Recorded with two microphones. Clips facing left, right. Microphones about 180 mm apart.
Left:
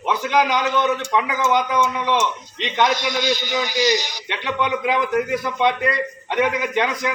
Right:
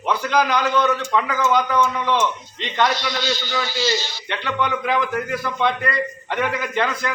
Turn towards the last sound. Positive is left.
turn(degrees=15)  # may be behind; listen again after turning